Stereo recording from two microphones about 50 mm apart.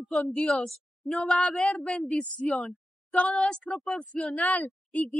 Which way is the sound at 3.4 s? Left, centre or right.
Centre.